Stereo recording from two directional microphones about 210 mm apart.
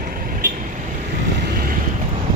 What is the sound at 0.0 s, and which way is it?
Vehicle, 40° right (ahead or behind).